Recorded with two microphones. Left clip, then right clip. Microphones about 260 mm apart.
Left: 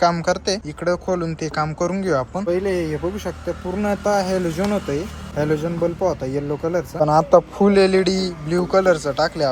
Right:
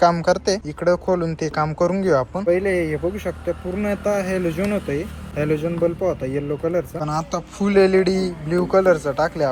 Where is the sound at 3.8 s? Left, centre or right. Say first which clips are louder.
Left 3 dB; centre.